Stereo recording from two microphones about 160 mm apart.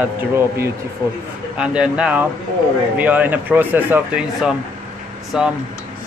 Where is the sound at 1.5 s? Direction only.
5° right (ahead or behind).